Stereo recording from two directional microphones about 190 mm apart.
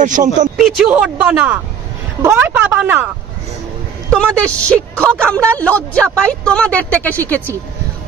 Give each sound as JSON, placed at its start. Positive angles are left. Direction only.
{"t": 0.0, "sound": "a man's voice", "side_deg": -40}
{"t": 0.7, "sound": "speech", "side_deg": -5}
{"t": 4.1, "sound": "a woman's voice", "side_deg": 5}